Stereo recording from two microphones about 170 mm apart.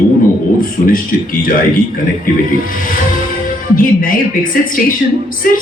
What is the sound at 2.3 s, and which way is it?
Speech, 55° left (ahead or behind).